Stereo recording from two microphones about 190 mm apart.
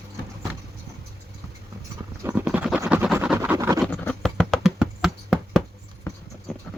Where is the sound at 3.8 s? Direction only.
5° left (ahead or behind).